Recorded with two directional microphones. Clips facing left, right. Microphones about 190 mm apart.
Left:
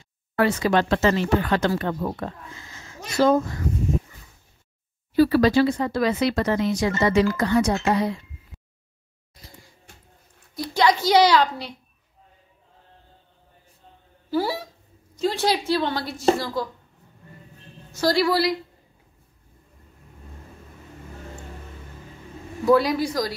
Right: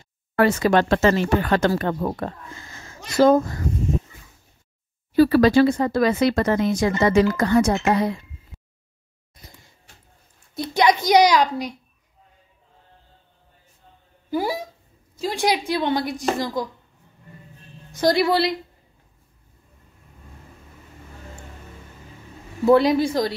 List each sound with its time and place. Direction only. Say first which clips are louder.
0.4 s speech: right 3 dB; 50° right (ahead or behind)
5.1 s speech: right 2 dB; 55° right (ahead or behind)
10.5 s a woman's voice: right 2 dB; 20° right (ahead or behind)
14.3 s a woman's voice: even; 15° right (ahead or behind)
17.9 s speech: right 2 dB; 20° right (ahead or behind)
22.7 s speech: right 3 dB; 25° right (ahead or behind)